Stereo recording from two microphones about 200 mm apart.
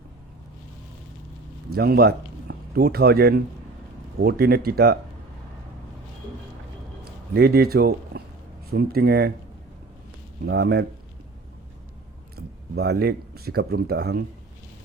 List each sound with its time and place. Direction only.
1.7 s a man's voice: 50° right (ahead or behind)
7.3 s speech: 50° right (ahead or behind)
10.4 s speech: 55° right (ahead or behind)
12.4 s speech: 55° right (ahead or behind)